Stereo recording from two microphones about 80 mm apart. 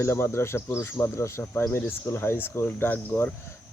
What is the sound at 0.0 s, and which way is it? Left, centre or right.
Speech, left.